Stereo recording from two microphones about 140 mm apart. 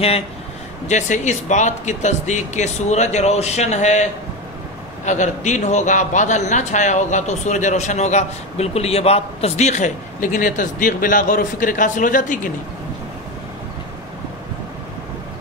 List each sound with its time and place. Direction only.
0.8 s a man's voice: 60° left (ahead or behind)
5.0 s a man's voice: 60° left (ahead or behind)